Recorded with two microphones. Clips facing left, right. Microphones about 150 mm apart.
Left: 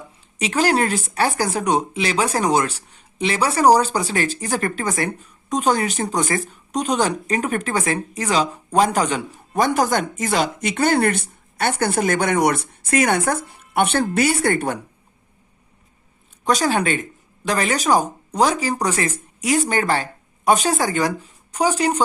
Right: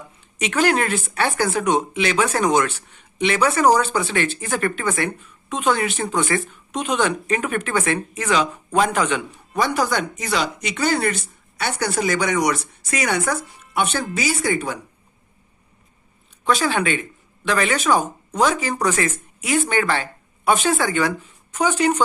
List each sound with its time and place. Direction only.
0.3 s speech: 35° left (ahead or behind); by 14.8 s 60° left (ahead or behind)
16.4 s speech: 40° left (ahead or behind)